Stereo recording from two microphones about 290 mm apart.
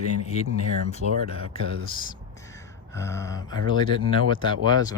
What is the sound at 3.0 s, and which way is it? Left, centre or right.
Speech, centre.